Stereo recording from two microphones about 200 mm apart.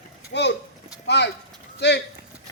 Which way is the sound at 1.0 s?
60° left (ahead or behind).